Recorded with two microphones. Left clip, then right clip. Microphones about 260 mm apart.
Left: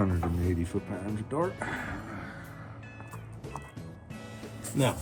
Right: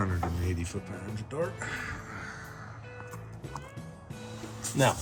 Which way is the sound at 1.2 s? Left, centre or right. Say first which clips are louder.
Left 2 dB; centre.